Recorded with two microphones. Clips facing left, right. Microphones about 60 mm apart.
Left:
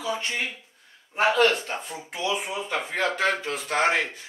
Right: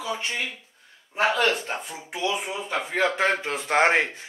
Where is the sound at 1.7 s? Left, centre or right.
Centre.